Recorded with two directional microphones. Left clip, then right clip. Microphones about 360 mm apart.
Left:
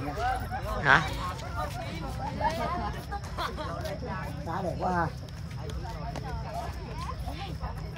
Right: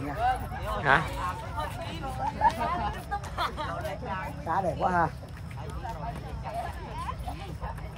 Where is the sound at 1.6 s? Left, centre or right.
Right.